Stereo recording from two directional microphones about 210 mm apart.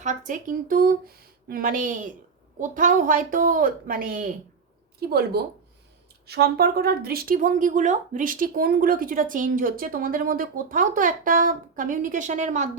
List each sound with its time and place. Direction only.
0.0 s a woman's voice: 35° right (ahead or behind)